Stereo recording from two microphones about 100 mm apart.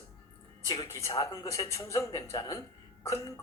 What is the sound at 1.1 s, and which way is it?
Speech, 35° left (ahead or behind).